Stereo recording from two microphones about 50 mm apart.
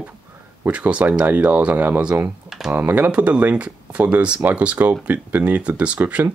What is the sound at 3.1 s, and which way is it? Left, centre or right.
Speech, right.